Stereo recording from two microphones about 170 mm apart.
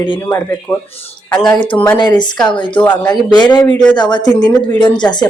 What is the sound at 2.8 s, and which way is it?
Speech, 10° left (ahead or behind).